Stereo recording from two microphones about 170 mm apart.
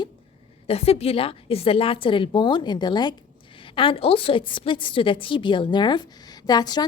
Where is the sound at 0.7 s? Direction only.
35° left (ahead or behind).